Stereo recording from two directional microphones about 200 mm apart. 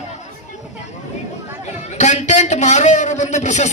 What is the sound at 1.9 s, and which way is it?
A man's voice, 35° left (ahead or behind).